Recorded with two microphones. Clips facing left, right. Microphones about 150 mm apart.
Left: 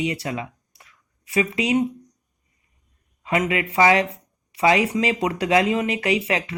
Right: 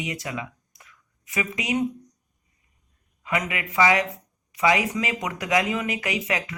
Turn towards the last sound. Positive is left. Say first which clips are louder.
# left 5 dB
turn(degrees=30)  # may be behind; listen again after turning